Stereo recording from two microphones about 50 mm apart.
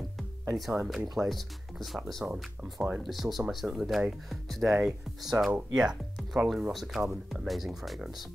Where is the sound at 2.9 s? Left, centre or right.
Centre.